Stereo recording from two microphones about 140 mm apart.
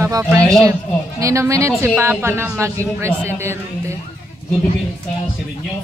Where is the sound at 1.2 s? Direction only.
20° right (ahead or behind).